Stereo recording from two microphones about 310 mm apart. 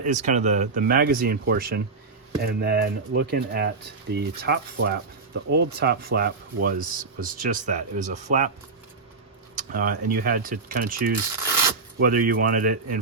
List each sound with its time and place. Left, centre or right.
0.0 s speech: right
9.6 s speech: right